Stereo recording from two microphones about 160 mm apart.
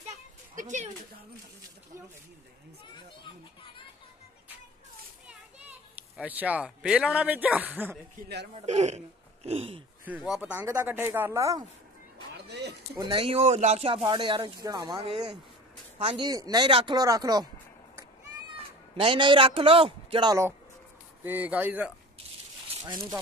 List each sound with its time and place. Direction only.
0.6 s speech: 50° right (ahead or behind)
5.2 s children playing: 10° right (ahead or behind)
7.7 s speech: 10° right (ahead or behind)
8.2 s speech: 90° right
8.5 s a man's voice: 45° right (ahead or behind)
10.0 s speech: 5° right (ahead or behind)
12.4 s speech: 90° right
12.9 s a man's voice: 30° right (ahead or behind)
16.3 s speech: 25° right (ahead or behind)
18.9 s a man's voice: 30° right (ahead or behind)
21.2 s speech: 10° right (ahead or behind)
22.8 s speech: 25° right (ahead or behind)